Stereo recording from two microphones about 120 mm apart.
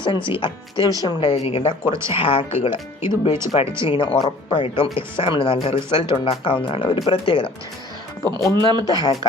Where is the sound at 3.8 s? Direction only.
45° left (ahead or behind).